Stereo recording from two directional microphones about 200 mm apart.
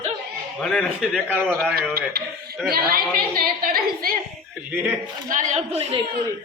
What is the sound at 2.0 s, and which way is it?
A man's voice, 50° right (ahead or behind).